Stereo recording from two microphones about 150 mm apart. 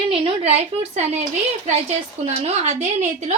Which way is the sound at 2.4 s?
45° right (ahead or behind).